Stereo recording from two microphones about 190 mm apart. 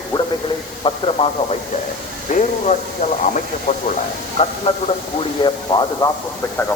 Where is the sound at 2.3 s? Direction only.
40° left (ahead or behind).